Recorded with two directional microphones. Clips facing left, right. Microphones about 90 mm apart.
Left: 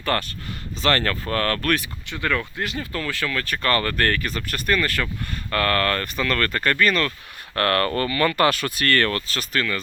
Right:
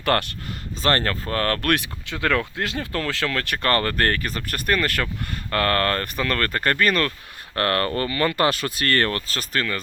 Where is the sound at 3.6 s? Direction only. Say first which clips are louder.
Even; 40° right (ahead or behind).